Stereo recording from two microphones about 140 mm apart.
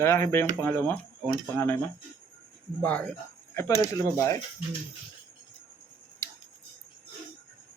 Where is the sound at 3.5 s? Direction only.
20° left (ahead or behind).